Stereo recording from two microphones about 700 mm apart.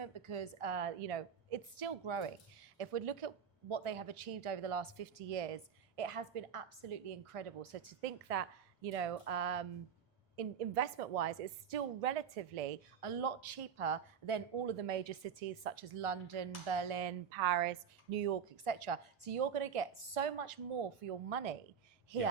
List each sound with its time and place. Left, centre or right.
0.0 s a woman's voice: right
17.4 s a woman's voice: right
18.5 s a woman's voice: right